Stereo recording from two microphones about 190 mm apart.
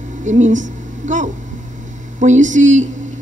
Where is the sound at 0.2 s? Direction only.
40° right (ahead or behind).